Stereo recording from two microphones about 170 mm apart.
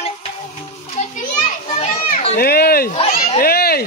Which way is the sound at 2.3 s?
65° left (ahead or behind).